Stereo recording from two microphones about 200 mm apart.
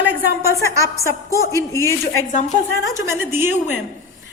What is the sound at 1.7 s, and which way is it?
Speech, 15° left (ahead or behind).